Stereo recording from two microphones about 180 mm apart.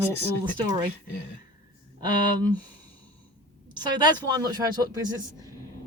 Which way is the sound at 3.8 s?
25° right (ahead or behind).